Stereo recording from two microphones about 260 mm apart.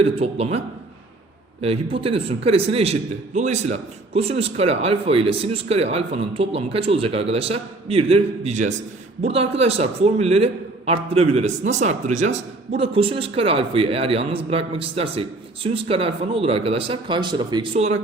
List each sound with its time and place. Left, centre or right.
0.0 s a man's voice: right
1.6 s a man's voice: right